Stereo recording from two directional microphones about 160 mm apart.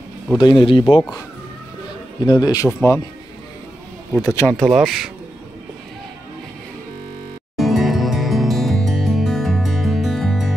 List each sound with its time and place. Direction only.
0.4 s speech: 30° left (ahead or behind)
2.2 s speech: 25° left (ahead or behind)
4.2 s speech: 20° left (ahead or behind)
4.5 s speech: centre (ahead or behind)
7.5 s music: centre (ahead or behind)